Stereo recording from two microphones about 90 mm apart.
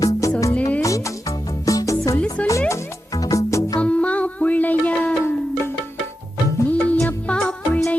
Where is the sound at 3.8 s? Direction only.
15° left (ahead or behind).